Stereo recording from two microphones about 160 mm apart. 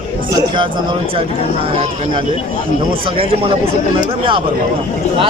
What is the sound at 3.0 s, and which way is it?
Speech, 35° right (ahead or behind).